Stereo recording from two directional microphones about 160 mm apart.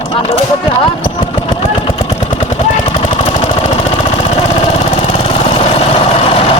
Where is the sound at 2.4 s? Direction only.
45° left (ahead or behind).